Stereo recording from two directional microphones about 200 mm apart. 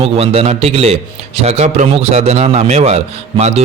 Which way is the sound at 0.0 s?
30° right (ahead or behind).